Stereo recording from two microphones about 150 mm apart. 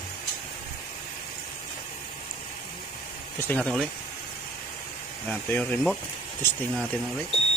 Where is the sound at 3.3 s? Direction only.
10° left (ahead or behind).